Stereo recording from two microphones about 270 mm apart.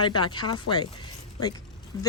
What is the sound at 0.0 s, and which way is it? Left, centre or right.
Speech, centre.